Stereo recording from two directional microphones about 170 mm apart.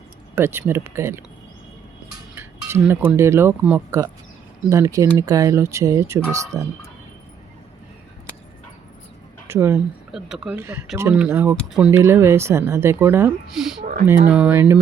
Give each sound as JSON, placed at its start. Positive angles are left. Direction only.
{"t": 0.3, "sound": "speech", "side_deg": -15}
{"t": 2.3, "sound": "speech", "side_deg": -15}
{"t": 9.5, "sound": "speech", "side_deg": -15}
{"t": 10.1, "sound": "speech", "side_deg": 0}
{"t": 11.5, "sound": "speech", "side_deg": 0}
{"t": 11.9, "sound": "speech", "side_deg": -15}